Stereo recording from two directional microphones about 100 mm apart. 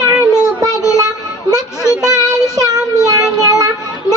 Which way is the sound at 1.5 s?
35° right (ahead or behind).